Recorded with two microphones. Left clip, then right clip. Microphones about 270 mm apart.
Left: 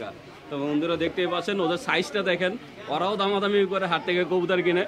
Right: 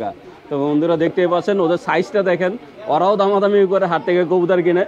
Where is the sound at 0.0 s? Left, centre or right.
Right.